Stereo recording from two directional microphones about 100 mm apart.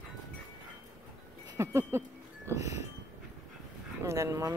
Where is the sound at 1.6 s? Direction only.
25° right (ahead or behind).